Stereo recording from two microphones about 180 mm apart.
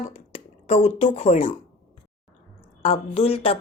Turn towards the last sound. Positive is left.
turn(degrees=35)  # may be behind; listen again after turning